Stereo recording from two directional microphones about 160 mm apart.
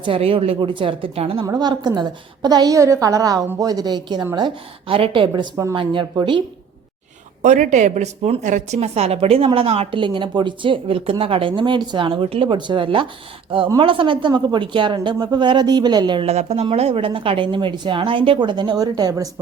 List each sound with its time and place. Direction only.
0.0 s a woman's voice: 35° right (ahead or behind)
1.5 s a woman's voice: 25° right (ahead or behind)
7.4 s a woman's voice: 50° right (ahead or behind); by 16.3 s 30° right (ahead or behind)
16.3 s a woman's voice: 40° right (ahead or behind); by 19.3 s 20° right (ahead or behind)